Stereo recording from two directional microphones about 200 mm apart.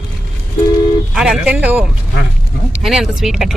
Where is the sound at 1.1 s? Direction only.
5° right (ahead or behind).